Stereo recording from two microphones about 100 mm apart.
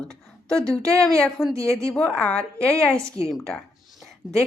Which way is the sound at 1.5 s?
30° right (ahead or behind).